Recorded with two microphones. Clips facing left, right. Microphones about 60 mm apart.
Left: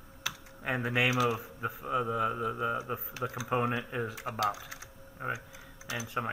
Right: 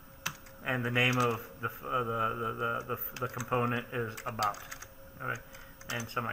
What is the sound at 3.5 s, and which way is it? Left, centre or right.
Speech, centre.